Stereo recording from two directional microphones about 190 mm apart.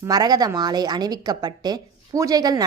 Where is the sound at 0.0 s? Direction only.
20° right (ahead or behind).